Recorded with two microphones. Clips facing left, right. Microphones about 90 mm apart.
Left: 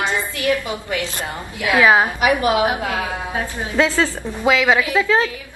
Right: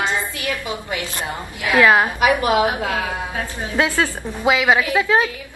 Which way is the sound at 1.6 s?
20° left (ahead or behind).